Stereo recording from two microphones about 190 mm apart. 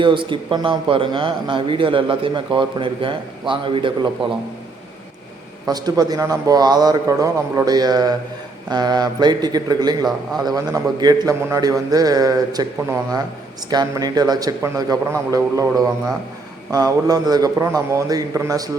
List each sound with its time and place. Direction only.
0.0 s a man's voice: 25° right (ahead or behind)
5.6 s a man's voice: 20° right (ahead or behind)
13.7 s a man's voice: 20° right (ahead or behind)